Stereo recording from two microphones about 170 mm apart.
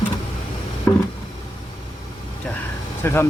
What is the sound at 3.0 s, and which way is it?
Speech, 15° left (ahead or behind).